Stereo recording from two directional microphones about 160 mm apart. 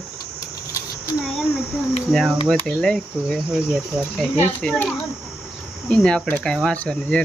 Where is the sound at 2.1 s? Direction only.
Centre (ahead or behind).